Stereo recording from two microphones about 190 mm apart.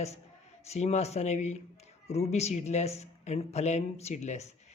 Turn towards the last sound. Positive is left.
turn(degrees=35)  # may be behind; listen again after turning